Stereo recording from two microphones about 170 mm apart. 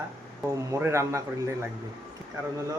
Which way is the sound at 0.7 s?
15° right (ahead or behind).